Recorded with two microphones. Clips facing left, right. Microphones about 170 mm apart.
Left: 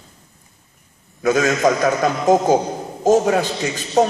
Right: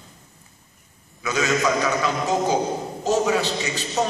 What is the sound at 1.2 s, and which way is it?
A man's voice, 50° left (ahead or behind).